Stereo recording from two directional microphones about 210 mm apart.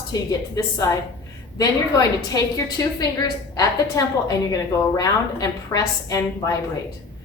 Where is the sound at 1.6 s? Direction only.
15° left (ahead or behind).